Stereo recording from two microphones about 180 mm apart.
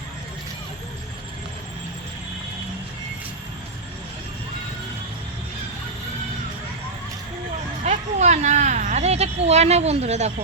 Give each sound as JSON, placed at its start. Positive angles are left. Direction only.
{"t": 7.9, "sound": "speech", "side_deg": -40}